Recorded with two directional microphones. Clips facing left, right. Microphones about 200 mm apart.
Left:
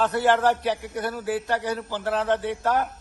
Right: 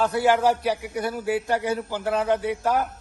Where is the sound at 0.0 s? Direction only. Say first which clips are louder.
Right 1 dB; 10° right (ahead or behind).